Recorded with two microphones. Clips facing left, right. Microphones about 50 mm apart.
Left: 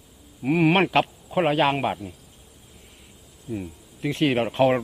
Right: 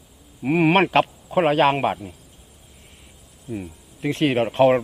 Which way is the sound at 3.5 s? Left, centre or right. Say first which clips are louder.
Even; centre.